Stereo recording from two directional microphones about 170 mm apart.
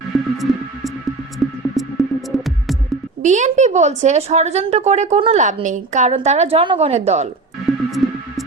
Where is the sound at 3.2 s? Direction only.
45° right (ahead or behind).